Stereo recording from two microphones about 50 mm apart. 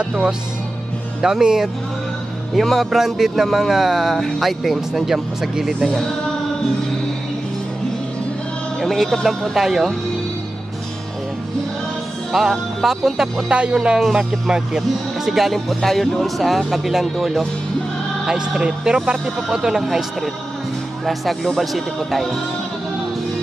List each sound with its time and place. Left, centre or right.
1.2 s speech: centre
2.5 s speech: centre
8.8 s speech: centre
12.3 s speech: centre
13.5 s speech: centre